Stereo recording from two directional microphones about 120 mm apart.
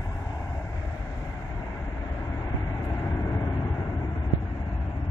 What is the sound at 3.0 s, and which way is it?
Vehicle, 15° left (ahead or behind).